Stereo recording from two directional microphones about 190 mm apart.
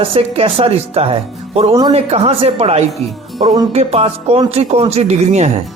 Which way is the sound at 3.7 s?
35° right (ahead or behind).